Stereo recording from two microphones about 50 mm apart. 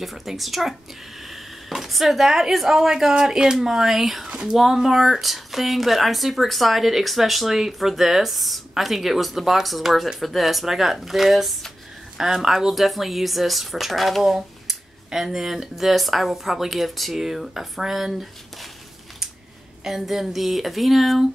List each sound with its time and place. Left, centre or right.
0.0 s speech: centre
4.3 s speech: centre
4.6 s speech: centre
19.8 s speech: centre